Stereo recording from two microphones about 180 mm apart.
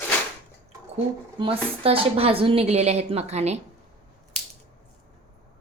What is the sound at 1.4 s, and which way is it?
A woman's voice, 30° right (ahead or behind).